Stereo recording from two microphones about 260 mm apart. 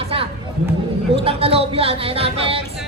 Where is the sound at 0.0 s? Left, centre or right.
Right.